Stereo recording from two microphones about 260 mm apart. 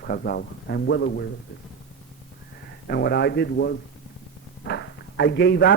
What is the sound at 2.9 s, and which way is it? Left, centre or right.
Speech, left.